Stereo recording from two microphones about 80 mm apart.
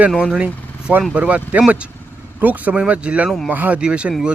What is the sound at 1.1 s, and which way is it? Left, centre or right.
Speech, centre.